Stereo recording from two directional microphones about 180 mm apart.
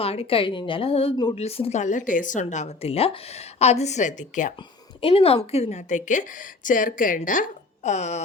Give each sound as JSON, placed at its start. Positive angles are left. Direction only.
{"t": 0.0, "sound": "a woman's voice", "side_deg": 30}
{"t": 4.9, "sound": "a woman's voice", "side_deg": 30}